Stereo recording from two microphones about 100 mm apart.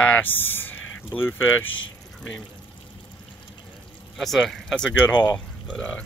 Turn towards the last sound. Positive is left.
turn(degrees=10)  # may be behind; listen again after turning